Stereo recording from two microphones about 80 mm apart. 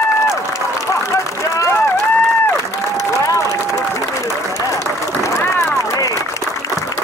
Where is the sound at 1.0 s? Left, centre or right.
Left.